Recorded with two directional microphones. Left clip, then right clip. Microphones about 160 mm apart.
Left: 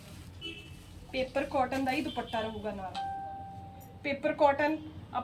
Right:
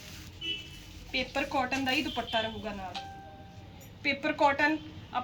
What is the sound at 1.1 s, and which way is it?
A woman's voice, 5° left (ahead or behind).